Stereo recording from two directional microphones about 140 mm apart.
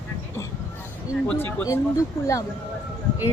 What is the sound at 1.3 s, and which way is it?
Speech, 15° left (ahead or behind).